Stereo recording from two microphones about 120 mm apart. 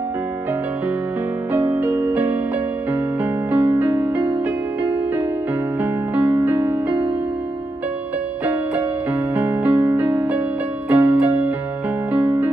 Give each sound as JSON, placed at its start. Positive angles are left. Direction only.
{"t": 1.7, "sound": "music", "side_deg": -20}
{"t": 3.5, "sound": "music", "side_deg": -15}
{"t": 5.8, "sound": "music", "side_deg": -15}
{"t": 9.3, "sound": "music", "side_deg": -15}